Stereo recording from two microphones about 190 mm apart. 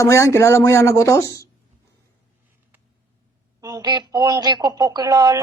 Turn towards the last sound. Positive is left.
turn(degrees=-20)  # may be behind; listen again after turning